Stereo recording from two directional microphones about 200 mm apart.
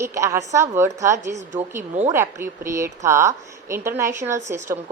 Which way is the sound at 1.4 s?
40° right (ahead or behind).